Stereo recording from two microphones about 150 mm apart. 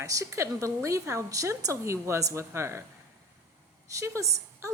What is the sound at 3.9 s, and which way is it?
Speech, 20° right (ahead or behind).